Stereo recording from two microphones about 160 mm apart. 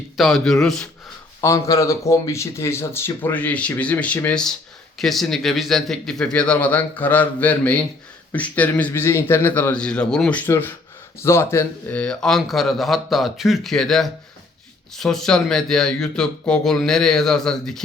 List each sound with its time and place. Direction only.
0.2 s a man's voice: centre (ahead or behind)
1.4 s a man's voice: 20° left (ahead or behind); by 17.8 s 5° left (ahead or behind)